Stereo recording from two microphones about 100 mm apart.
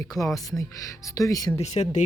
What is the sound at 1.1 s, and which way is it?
Speech, 35° left (ahead or behind).